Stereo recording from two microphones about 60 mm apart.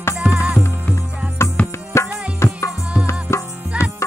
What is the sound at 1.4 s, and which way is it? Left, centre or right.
Music, left.